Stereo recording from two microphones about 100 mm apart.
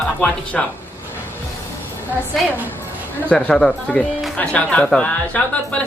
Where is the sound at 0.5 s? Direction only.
10° left (ahead or behind).